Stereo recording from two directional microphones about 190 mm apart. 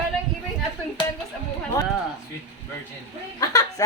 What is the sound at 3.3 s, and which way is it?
Snicker, 20° left (ahead or behind).